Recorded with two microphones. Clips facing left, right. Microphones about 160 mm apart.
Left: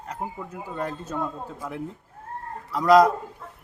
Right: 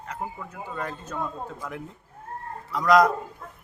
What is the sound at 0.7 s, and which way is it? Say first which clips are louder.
Speech: left 3 dB; 35° left (ahead or behind).